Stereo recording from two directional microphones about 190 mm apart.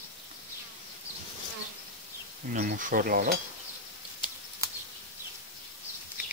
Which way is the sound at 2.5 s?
45° right (ahead or behind).